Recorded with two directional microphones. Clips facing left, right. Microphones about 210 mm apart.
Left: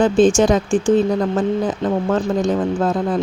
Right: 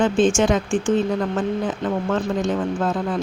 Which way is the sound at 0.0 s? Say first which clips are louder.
Left 4 dB; 35° left (ahead or behind).